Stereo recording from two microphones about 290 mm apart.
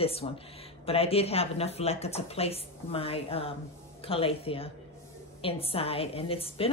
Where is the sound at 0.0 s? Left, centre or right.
Centre.